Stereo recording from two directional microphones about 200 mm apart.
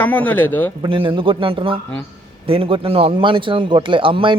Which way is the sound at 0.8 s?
25° right (ahead or behind).